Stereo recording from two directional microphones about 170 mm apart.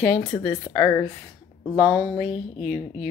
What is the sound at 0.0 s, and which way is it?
Speech, 20° left (ahead or behind).